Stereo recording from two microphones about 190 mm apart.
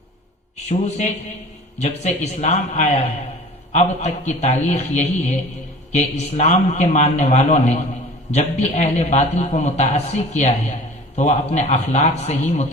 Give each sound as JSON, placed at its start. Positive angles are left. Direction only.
{"t": 0.7, "sound": "a man's voice", "side_deg": 35}